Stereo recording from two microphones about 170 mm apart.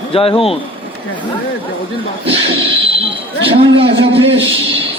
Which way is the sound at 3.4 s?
30° right (ahead or behind).